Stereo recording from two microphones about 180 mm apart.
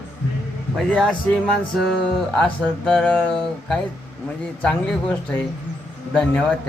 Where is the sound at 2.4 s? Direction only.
5° left (ahead or behind).